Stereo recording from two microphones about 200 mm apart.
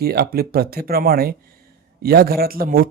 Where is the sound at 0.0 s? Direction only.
50° right (ahead or behind).